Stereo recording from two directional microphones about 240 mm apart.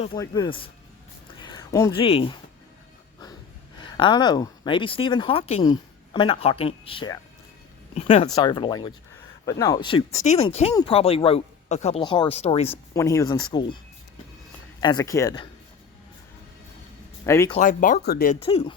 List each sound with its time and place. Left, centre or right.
0.0 s speech: centre
3.8 s speech: centre
13.0 s speech: centre
14.8 s speech: centre
17.2 s speech: centre
17.5 s speech: left
18.3 s speech: left